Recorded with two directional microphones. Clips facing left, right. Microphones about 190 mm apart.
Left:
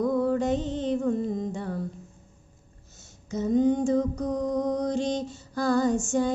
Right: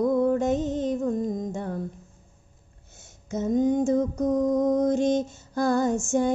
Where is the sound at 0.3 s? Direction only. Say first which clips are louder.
Right 2 dB; 45° right (ahead or behind).